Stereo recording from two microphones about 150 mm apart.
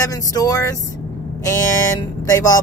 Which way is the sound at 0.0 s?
20° left (ahead or behind).